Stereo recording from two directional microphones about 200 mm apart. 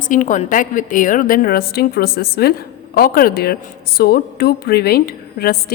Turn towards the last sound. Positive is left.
turn(degrees=50)  # may be behind; listen again after turning